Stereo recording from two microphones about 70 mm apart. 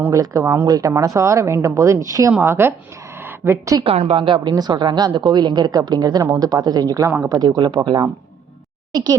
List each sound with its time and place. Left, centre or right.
0.1 s speech: right
2.4 s speech: right
3.2 s a sound: right
3.7 s a woman's voice: right
7.3 s speech: right
8.9 s a woman's voice: right